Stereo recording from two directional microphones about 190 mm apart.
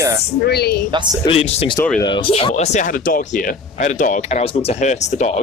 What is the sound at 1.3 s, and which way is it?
Speech, 30° left (ahead or behind).